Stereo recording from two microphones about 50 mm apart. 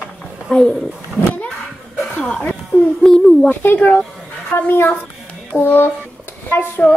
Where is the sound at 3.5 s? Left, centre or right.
Left.